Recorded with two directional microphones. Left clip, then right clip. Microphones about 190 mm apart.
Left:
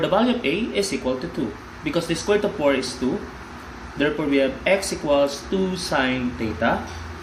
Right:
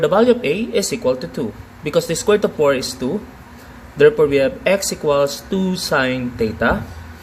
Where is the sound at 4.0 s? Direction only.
70° right (ahead or behind).